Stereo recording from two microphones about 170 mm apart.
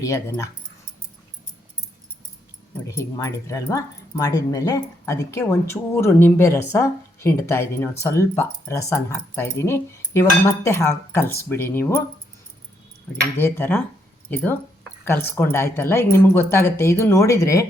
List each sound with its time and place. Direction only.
0.0 s speech: 20° left (ahead or behind)
2.8 s speech: 20° left (ahead or behind)
13.4 s speech: 15° left (ahead or behind)